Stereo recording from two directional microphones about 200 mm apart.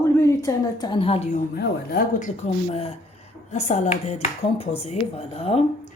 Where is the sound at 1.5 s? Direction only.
50° left (ahead or behind).